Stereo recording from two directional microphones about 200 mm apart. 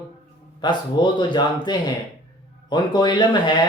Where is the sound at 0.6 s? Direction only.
20° left (ahead or behind).